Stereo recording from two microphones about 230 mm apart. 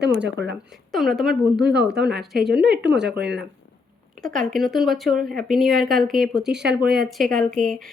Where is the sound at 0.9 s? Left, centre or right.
Centre.